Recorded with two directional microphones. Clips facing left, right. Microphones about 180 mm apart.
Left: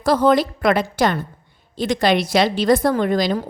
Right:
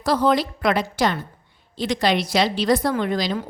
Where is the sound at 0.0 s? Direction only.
50° left (ahead or behind).